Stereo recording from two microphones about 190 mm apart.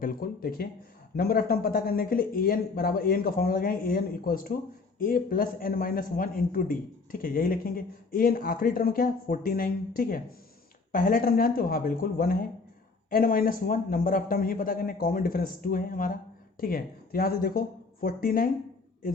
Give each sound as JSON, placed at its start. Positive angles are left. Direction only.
{"t": 0.0, "sound": "speech", "side_deg": 50}